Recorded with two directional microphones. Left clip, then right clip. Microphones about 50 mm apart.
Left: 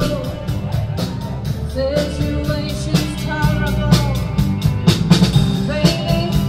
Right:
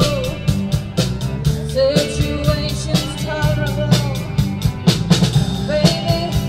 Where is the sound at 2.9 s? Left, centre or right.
Right.